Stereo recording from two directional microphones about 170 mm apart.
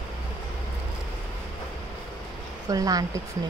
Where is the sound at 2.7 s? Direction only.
20° right (ahead or behind).